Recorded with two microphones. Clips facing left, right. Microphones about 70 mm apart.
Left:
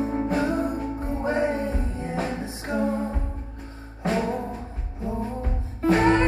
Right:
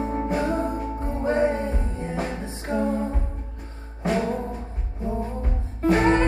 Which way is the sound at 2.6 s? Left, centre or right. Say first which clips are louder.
Right 1 dB; centre.